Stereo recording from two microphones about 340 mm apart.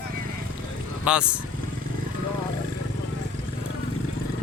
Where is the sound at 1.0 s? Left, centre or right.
Centre.